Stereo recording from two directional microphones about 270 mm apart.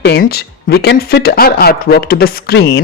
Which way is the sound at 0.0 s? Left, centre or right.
Left.